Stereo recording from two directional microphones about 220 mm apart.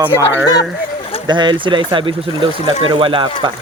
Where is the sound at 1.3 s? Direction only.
20° right (ahead or behind).